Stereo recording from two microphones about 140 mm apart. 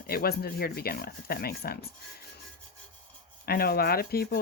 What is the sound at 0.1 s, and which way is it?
Speech, 90° left.